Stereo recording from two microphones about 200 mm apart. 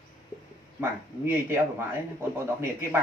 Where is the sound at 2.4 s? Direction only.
15° right (ahead or behind).